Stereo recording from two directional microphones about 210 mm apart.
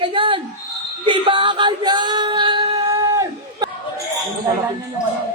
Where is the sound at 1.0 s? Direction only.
25° right (ahead or behind).